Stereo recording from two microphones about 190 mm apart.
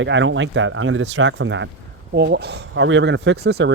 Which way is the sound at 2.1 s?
60° right (ahead or behind).